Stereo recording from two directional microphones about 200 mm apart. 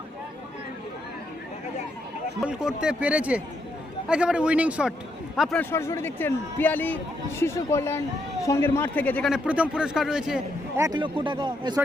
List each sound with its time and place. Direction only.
2.5 s a man's voice: 5° right (ahead or behind)
5.7 s a man's voice: 15° left (ahead or behind)
9.3 s a man's voice: 5° right (ahead or behind)
10.8 s a man's voice: 20° right (ahead or behind)